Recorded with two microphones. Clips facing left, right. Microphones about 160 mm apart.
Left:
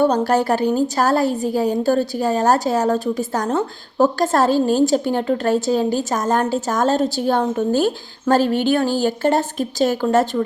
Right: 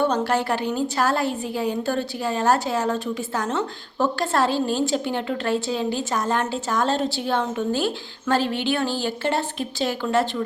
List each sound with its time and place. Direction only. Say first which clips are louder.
0.0 s a woman's voice: left 5 dB; 40° left (ahead or behind)